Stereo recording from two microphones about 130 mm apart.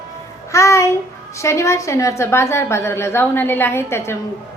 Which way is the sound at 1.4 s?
25° left (ahead or behind).